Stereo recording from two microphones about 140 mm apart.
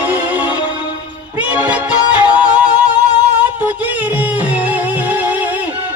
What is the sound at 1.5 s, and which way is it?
Music, 10° right (ahead or behind).